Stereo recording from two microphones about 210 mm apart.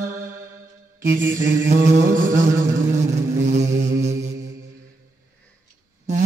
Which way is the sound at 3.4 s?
35° right (ahead or behind).